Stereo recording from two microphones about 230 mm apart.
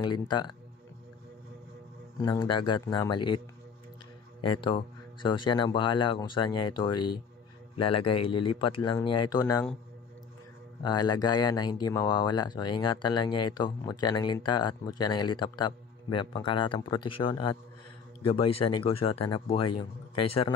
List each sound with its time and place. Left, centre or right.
0.0 s speech: centre
2.2 s speech: centre
4.5 s speech: left
10.8 s speech: centre